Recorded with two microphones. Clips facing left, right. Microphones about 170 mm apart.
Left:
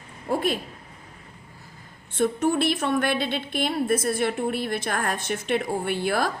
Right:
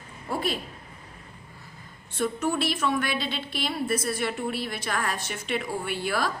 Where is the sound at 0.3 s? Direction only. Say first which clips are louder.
Left 4 dB; 50° left (ahead or behind).